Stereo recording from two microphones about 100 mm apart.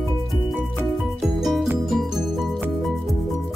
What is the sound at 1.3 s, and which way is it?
Music, centre (ahead or behind).